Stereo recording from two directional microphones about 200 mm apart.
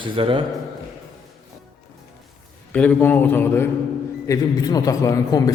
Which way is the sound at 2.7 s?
5° left (ahead or behind).